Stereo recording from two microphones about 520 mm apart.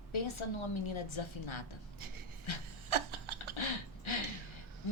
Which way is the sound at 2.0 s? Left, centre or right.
Right.